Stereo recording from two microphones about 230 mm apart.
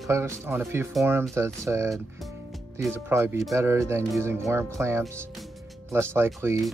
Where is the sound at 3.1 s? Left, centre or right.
Centre.